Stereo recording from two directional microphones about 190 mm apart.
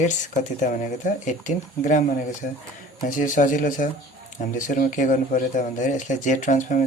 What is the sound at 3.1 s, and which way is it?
Speech, 45° left (ahead or behind).